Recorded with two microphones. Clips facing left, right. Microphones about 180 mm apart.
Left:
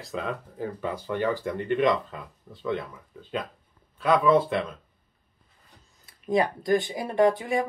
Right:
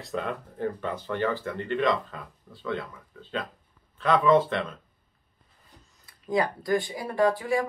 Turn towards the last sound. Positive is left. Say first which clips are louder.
# left 2 dB
turn(degrees=20)  # may be behind; listen again after turning